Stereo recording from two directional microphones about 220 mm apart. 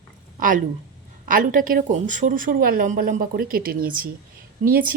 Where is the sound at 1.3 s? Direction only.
40° right (ahead or behind).